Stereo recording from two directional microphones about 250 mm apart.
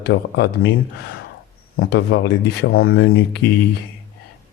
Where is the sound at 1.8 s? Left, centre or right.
Left.